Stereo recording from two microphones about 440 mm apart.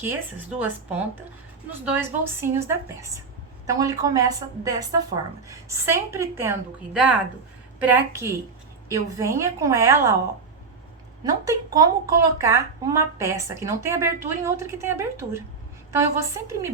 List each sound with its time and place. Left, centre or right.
0.0 s a woman's voice: centre
11.2 s a woman's voice: centre